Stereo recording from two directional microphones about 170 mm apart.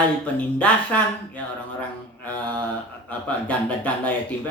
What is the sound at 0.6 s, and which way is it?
Speech, 10° left (ahead or behind).